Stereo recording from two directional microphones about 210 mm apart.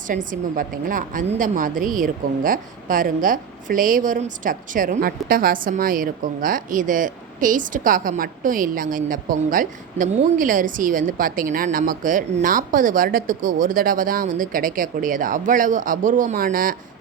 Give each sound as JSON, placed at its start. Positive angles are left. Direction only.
{"t": 0.3, "sound": "a woman's voice", "side_deg": -40}